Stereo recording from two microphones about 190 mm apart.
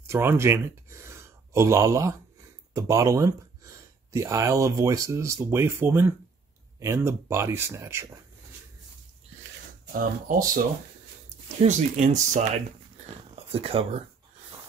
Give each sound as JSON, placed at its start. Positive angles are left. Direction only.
{"t": 0.0, "sound": "speech", "side_deg": -15}
{"t": 10.2, "sound": "speech", "side_deg": -45}
{"t": 13.5, "sound": "speech", "side_deg": -30}